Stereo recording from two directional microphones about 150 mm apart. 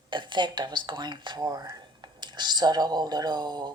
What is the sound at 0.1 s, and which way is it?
Speech, 30° right (ahead or behind).